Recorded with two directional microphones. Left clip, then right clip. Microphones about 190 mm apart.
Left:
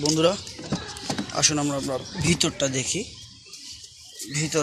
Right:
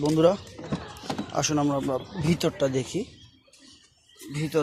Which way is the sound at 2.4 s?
25° right (ahead or behind).